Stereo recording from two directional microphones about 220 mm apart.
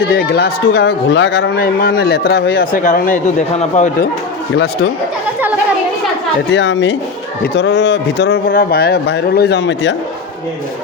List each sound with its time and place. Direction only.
0.1 s speech: 50° left (ahead or behind); by 3.9 s 30° left (ahead or behind)
4.5 s speech: 45° left (ahead or behind)
6.5 s speech: 55° left (ahead or behind)